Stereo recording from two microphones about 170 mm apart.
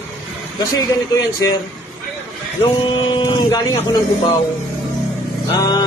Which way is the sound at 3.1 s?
30° left (ahead or behind).